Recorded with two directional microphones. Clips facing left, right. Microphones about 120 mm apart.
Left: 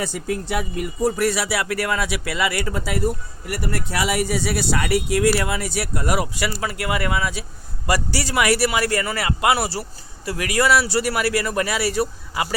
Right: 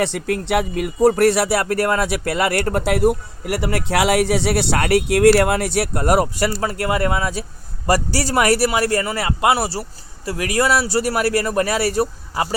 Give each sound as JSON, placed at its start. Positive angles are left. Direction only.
{"t": 0.0, "sound": "a man's voice", "side_deg": -75}